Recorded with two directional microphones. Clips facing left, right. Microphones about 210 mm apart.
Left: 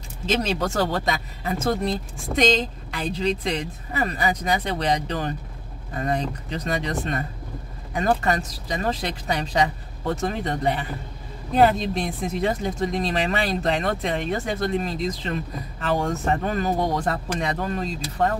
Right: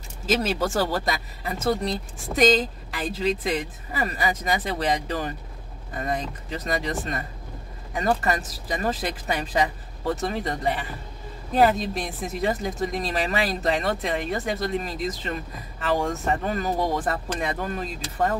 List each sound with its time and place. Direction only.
0.4 s speech: 5° right (ahead or behind)